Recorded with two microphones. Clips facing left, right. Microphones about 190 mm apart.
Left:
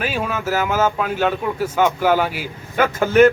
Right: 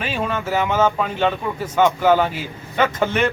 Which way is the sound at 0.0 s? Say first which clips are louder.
Left 1 dB; 5° left (ahead or behind).